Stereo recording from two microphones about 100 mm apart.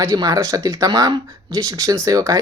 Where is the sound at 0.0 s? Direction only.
35° right (ahead or behind).